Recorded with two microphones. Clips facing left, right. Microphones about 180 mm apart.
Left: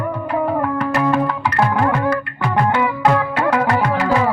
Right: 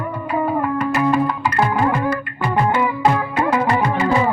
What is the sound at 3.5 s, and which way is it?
Music, 70° left (ahead or behind).